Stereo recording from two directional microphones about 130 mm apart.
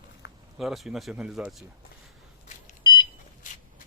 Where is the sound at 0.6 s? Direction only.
Centre (ahead or behind).